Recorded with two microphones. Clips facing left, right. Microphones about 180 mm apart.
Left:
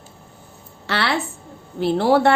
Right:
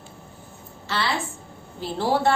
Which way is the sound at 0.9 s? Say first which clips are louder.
Left 4 dB; 70° left (ahead or behind).